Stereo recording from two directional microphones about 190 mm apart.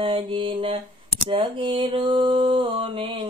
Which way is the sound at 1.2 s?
30° right (ahead or behind).